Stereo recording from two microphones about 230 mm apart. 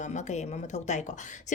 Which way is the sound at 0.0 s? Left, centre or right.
Left.